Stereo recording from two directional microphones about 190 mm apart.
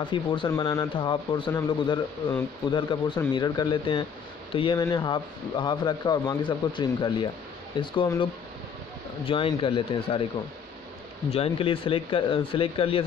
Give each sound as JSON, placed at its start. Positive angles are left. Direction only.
{"t": 0.0, "sound": "a man's voice", "side_deg": 25}
{"t": 11.3, "sound": "a man's voice", "side_deg": 30}